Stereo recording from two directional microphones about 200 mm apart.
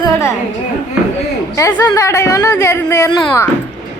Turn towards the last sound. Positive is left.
turn(degrees=15)  # may be behind; listen again after turning